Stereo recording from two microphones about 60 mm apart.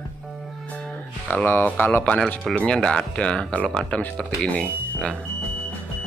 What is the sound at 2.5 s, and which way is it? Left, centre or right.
Speech, centre.